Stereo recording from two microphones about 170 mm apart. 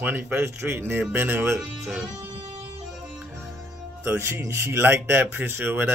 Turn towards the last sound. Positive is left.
turn(degrees=-10)  # may be behind; listen again after turning